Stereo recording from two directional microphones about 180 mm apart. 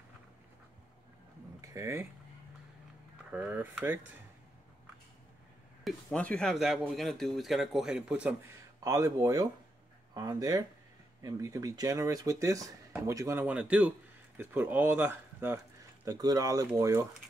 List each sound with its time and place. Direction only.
1.6 s a sound: 15° right (ahead or behind)
3.3 s speech: 10° right (ahead or behind)
5.9 s a man's voice: 5° left (ahead or behind)
8.8 s speech: 20° right (ahead or behind)